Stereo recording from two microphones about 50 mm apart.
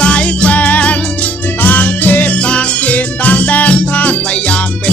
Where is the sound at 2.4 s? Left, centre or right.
Left.